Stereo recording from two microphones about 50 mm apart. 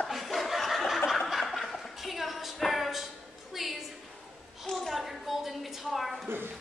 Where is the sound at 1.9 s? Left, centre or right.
Centre.